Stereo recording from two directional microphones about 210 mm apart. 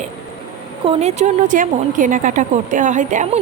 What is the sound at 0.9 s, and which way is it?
A woman's voice, 35° right (ahead or behind).